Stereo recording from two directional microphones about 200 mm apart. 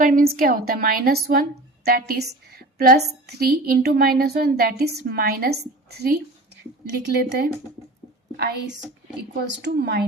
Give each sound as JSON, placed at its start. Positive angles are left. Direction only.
{"t": 0.0, "sound": "a woman's voice", "side_deg": -45}